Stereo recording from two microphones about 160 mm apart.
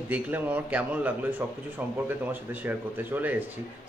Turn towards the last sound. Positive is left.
turn(degrees=-10)  # may be behind; listen again after turning